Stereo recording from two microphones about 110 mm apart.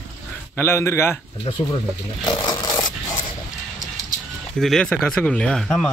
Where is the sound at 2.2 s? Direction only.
40° left (ahead or behind).